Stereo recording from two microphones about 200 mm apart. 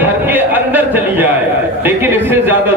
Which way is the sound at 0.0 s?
10° right (ahead or behind).